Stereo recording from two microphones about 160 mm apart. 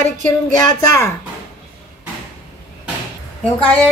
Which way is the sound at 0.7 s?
20° left (ahead or behind).